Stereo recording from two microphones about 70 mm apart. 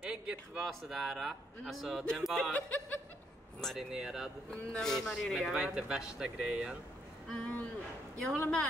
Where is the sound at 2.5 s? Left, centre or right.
Centre.